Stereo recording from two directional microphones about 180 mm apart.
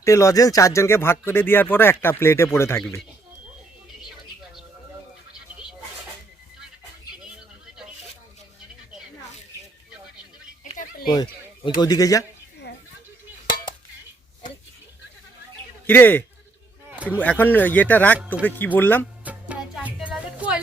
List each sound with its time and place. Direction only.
0.0 s speech: 15° left (ahead or behind)
10.6 s a sound: 45° left (ahead or behind)
11.8 s speech: 20° left (ahead or behind)
15.9 s speech: 10° left (ahead or behind)
19.2 s music: 10° right (ahead or behind)